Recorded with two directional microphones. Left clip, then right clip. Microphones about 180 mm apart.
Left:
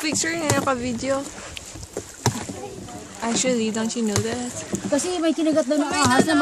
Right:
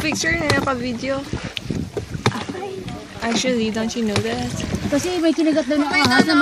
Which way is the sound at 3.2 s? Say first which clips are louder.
Right 2 dB; 5° left (ahead or behind).